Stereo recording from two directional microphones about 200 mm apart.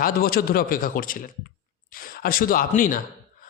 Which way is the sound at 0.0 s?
45° left (ahead or behind).